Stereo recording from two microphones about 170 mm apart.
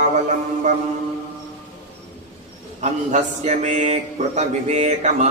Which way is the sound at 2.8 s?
45° right (ahead or behind).